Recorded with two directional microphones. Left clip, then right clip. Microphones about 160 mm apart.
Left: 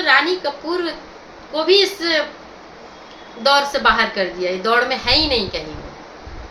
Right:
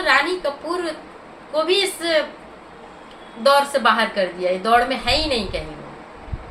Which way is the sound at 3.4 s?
10° left (ahead or behind).